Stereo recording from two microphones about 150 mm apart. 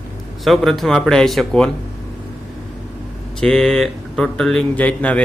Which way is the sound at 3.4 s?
5° left (ahead or behind).